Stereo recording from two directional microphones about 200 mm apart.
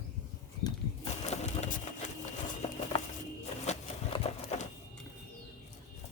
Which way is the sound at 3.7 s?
30° left (ahead or behind).